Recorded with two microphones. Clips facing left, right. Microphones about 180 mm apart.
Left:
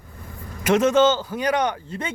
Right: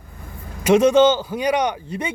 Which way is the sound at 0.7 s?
15° right (ahead or behind).